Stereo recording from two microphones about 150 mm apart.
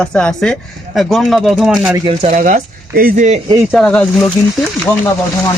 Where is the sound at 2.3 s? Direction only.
60° right (ahead or behind).